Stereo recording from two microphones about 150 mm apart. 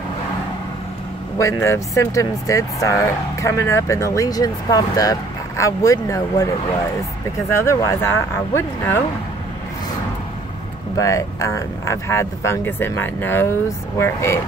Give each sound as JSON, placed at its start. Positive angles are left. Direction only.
{"t": 1.4, "sound": "speech", "side_deg": 20}
{"t": 7.5, "sound": "speech", "side_deg": 20}
{"t": 11.0, "sound": "speech", "side_deg": 20}